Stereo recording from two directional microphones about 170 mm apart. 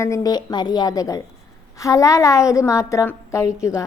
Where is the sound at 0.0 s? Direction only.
20° left (ahead or behind).